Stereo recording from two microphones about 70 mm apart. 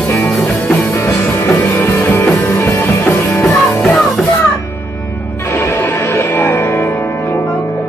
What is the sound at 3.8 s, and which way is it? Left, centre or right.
Music, centre.